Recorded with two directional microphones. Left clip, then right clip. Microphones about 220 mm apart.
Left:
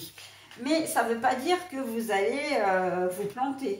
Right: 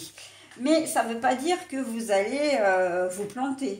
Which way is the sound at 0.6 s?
40° right (ahead or behind).